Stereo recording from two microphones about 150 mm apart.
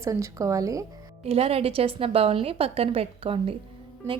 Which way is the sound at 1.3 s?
40° right (ahead or behind).